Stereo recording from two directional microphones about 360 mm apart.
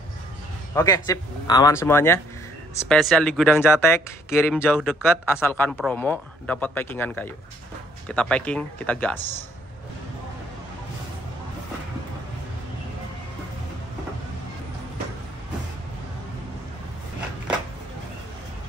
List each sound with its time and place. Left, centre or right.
0.7 s speech: centre